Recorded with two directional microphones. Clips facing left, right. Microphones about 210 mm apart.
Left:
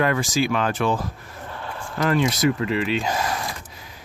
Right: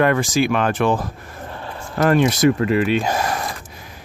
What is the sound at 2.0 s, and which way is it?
Speech, 50° right (ahead or behind).